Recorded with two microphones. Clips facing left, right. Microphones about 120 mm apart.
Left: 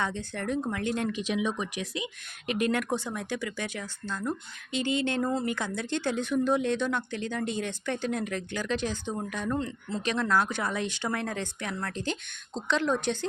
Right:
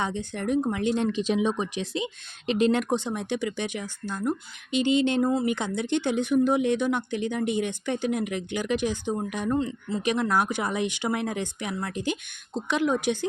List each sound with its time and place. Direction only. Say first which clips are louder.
0.0 s speech: right 3 dB; 15° right (ahead or behind)
9.6 s speech: right 5 dB; 5° right (ahead or behind)